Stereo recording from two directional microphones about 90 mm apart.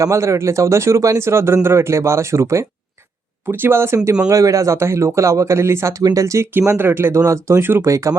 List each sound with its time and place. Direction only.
0.0 s a man's voice: 35° right (ahead or behind)
4.3 s a man's voice: 40° right (ahead or behind)
6.0 s a man's voice: 40° right (ahead or behind); by 7.2 s 25° right (ahead or behind)
7.2 s a man's voice: 35° right (ahead or behind)